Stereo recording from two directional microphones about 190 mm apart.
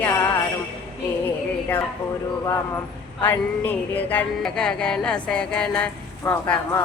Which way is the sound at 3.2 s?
10° left (ahead or behind).